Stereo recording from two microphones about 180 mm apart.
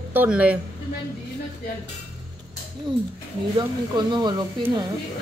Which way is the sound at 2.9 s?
25° right (ahead or behind).